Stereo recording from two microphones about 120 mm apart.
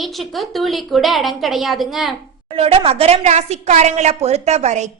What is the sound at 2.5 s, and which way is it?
A woman's voice, 50° right (ahead or behind).